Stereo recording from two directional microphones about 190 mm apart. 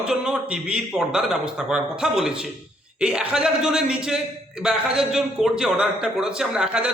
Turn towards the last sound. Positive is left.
turn(degrees=-5)  # may be behind; listen again after turning